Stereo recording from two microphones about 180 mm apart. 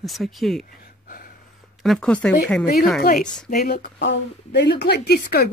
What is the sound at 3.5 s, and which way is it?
Speech, 55° left (ahead or behind).